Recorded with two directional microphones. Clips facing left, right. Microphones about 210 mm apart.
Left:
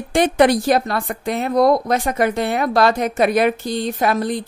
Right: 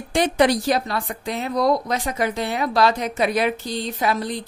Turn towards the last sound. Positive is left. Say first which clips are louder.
# left 4 dB
turn(degrees=55)  # may be behind; listen again after turning